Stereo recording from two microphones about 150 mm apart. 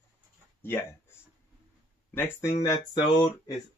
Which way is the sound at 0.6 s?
15° left (ahead or behind).